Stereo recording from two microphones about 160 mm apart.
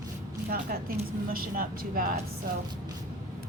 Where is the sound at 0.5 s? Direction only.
65° right (ahead or behind).